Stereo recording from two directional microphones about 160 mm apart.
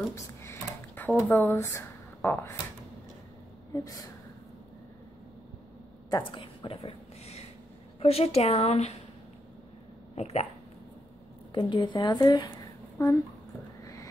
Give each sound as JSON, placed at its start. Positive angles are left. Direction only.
{"t": 0.1, "sound": "a sound", "side_deg": 15}
{"t": 1.3, "sound": "speech", "side_deg": 10}
{"t": 3.7, "sound": "a woman's voice", "side_deg": 20}
{"t": 6.0, "sound": "a sound", "side_deg": 25}
{"t": 8.0, "sound": "speech", "side_deg": 40}
{"t": 10.1, "sound": "speech", "side_deg": 40}
{"t": 11.5, "sound": "a woman's voice", "side_deg": 30}